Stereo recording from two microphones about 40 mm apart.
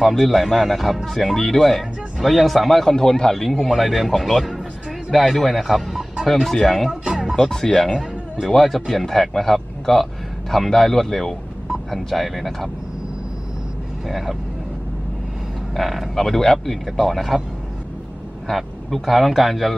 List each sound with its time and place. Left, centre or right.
0.0 s speech: centre
6.9 s music: centre
7.3 s speech: centre
9.0 s speech: centre
14.0 s speech: centre
15.7 s speech: centre
16.3 s speech: centre
18.5 s speech: centre